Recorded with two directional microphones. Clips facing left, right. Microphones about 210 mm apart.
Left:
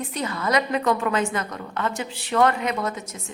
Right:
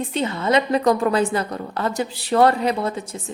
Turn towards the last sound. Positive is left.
turn(degrees=-30)  # may be behind; listen again after turning